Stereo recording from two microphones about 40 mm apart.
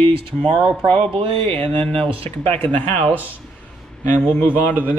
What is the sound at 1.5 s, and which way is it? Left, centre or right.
Speech, left.